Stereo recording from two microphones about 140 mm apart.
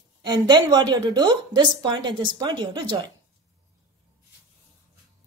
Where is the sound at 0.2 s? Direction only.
30° right (ahead or behind).